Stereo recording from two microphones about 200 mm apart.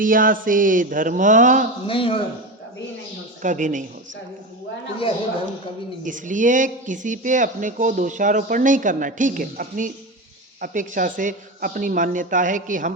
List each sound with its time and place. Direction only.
0.0 s mantra: 45° right (ahead or behind)
0.4 s speech: 45° right (ahead or behind)
1.9 s a man's voice: 25° left (ahead or behind)
3.4 s speech: 40° right (ahead or behind)
6.1 s speech: 40° right (ahead or behind)